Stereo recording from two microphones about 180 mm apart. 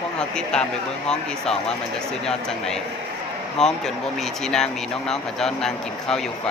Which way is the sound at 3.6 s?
Centre (ahead or behind).